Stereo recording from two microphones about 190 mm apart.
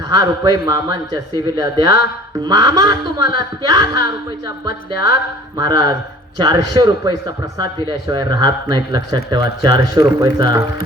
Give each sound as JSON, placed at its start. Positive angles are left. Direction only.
{"t": 0.2, "sound": "speech", "side_deg": -20}